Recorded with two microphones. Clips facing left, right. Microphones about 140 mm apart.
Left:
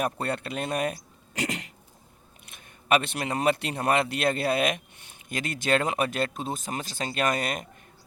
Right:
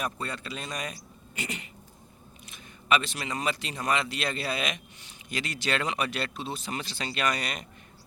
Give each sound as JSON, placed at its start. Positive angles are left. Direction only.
{"t": 0.0, "sound": "speech", "side_deg": 60}
{"t": 1.4, "sound": "a sound", "side_deg": 90}
{"t": 2.5, "sound": "a man's voice", "side_deg": 55}